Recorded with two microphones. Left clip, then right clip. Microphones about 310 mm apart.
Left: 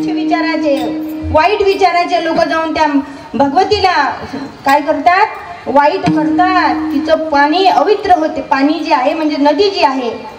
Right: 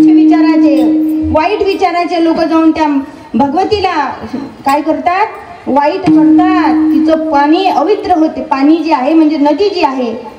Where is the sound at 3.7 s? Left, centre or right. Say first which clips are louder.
Left 1 dB; left.